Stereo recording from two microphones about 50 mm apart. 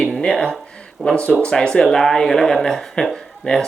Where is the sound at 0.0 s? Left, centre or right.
Centre.